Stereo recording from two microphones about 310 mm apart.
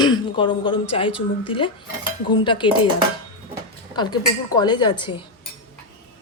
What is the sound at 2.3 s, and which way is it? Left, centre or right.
Speech, centre.